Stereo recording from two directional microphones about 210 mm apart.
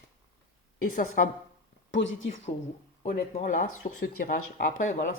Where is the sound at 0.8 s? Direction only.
40° left (ahead or behind).